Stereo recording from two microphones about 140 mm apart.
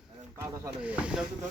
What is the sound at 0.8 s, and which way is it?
Speech, 10° right (ahead or behind).